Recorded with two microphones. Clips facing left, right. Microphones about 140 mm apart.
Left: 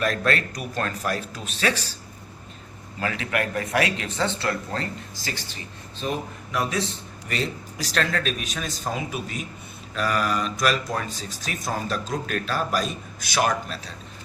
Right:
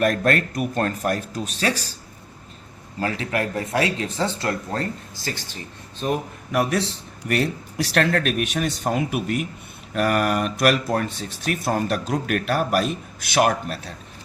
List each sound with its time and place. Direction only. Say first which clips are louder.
0.0 s a man's voice: right 4 dB; 50° right (ahead or behind)
3.0 s speech: right 2 dB; 35° right (ahead or behind)
6.0 s speech: right 4 dB; 55° right (ahead or behind)